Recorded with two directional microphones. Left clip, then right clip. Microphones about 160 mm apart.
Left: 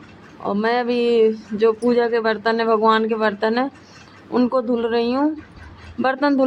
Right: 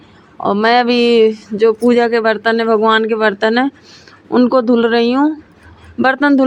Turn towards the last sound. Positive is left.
turn(degrees=-45)  # may be behind; listen again after turning